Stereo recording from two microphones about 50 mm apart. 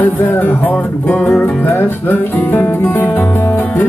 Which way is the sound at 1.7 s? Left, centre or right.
Left.